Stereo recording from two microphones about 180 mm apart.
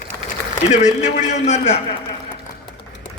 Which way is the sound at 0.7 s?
40° left (ahead or behind).